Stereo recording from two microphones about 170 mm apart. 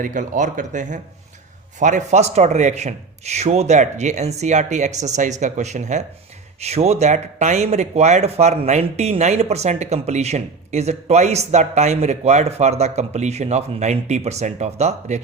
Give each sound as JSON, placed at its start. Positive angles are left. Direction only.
{"t": 0.0, "sound": "a man's voice", "side_deg": -50}